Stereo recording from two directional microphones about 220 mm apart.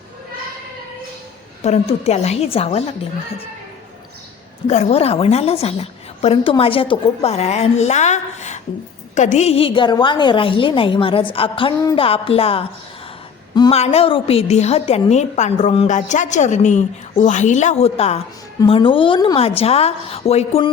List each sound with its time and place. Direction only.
1.6 s a woman's voice: 30° left (ahead or behind)
4.6 s a woman's voice: 30° left (ahead or behind)